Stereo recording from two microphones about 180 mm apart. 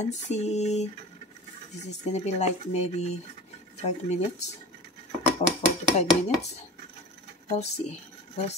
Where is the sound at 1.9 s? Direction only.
40° left (ahead or behind).